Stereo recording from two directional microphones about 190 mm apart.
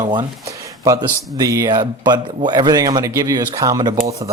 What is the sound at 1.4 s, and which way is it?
Speech, 15° right (ahead or behind).